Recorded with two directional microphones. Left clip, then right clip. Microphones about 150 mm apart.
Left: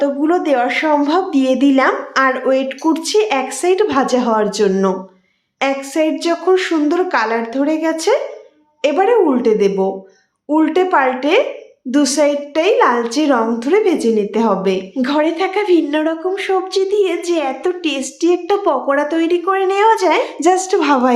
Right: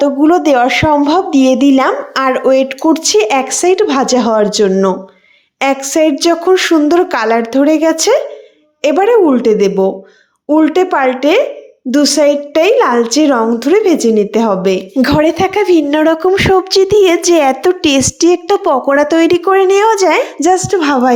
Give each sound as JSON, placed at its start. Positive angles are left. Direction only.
{"t": 0.0, "sound": "a woman's voice", "side_deg": -35}
{"t": 5.5, "sound": "a woman's voice", "side_deg": -50}